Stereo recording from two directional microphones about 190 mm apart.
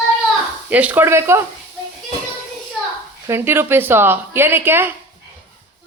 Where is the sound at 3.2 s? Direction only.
10° right (ahead or behind).